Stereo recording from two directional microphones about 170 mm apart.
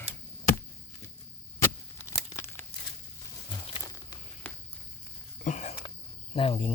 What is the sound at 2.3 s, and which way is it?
Tearing, 15° left (ahead or behind).